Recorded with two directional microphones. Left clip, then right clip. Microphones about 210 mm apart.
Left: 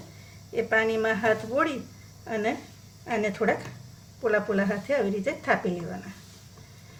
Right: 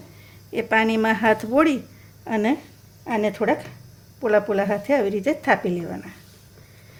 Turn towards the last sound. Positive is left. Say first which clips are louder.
# right 5 dB
turn(degrees=-40)  # may be behind; listen again after turning